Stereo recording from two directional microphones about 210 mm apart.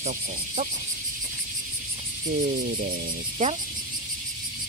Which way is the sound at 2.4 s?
40° right (ahead or behind).